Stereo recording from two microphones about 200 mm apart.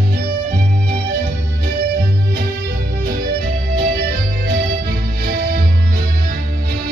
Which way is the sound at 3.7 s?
50° right (ahead or behind).